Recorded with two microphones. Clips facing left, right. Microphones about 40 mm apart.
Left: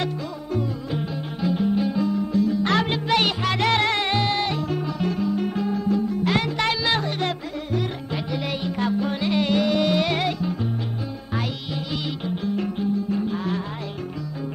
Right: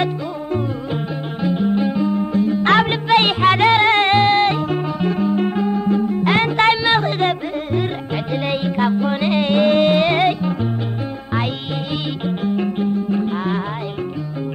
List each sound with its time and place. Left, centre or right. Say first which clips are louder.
1.4 s music: right 4 dB; right
12.3 s music: right 6 dB; right